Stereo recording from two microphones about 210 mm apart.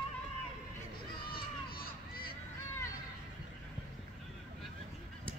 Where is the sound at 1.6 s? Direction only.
45° left (ahead or behind).